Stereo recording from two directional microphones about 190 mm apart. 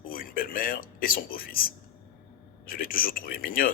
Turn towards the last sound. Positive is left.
turn(degrees=50)  # may be behind; listen again after turning